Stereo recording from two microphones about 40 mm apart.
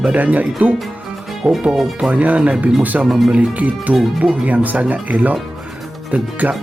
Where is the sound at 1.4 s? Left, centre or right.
Centre.